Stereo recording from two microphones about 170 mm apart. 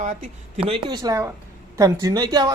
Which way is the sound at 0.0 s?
45° right (ahead or behind).